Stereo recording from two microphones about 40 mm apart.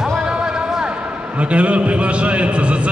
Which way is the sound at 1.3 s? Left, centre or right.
Right.